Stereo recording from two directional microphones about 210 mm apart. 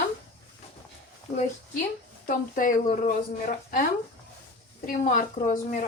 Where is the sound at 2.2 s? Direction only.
40° left (ahead or behind).